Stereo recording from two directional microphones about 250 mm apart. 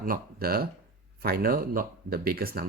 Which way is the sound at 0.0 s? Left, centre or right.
Right.